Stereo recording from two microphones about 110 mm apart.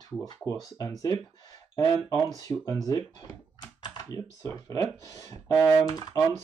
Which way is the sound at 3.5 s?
35° left (ahead or behind).